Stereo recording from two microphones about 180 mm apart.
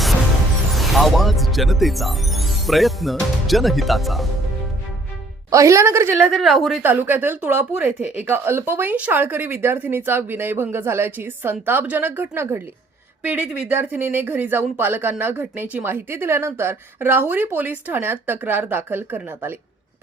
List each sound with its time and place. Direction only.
0.7 s speech: centre (ahead or behind)
5.5 s speech: 15° right (ahead or behind)
6.2 s speech: centre (ahead or behind)